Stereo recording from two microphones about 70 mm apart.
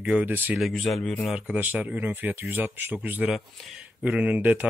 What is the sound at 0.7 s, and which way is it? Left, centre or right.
Speech, centre.